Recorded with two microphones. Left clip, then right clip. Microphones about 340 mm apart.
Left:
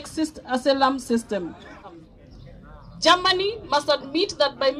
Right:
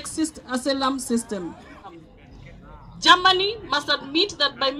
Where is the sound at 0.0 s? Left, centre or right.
Left.